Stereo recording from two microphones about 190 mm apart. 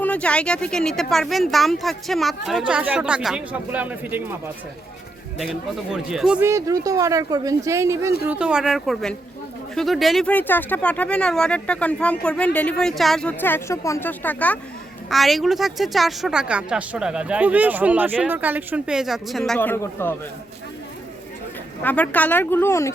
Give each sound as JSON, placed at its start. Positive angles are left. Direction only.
{"t": 0.0, "sound": "speech", "side_deg": 5}
{"t": 5.4, "sound": "speech", "side_deg": -5}
{"t": 6.5, "sound": "speech", "side_deg": -15}
{"t": 21.8, "sound": "speech", "side_deg": 10}